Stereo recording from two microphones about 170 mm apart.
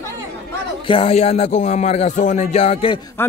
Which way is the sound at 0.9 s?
35° left (ahead or behind).